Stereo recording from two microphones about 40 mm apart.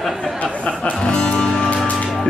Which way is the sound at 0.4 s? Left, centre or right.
Left.